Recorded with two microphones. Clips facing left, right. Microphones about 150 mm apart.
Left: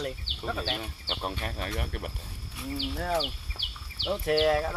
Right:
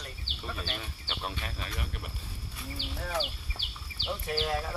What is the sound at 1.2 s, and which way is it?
Speech, 50° left (ahead or behind).